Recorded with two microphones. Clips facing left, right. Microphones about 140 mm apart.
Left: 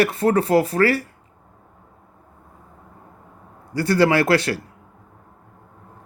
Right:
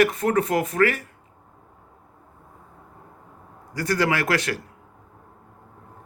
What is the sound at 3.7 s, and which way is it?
Speech, 30° left (ahead or behind).